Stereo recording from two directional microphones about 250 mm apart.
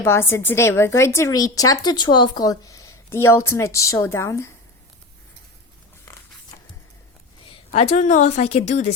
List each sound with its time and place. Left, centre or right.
0.0 s a woman's voice: centre
7.7 s a woman's voice: left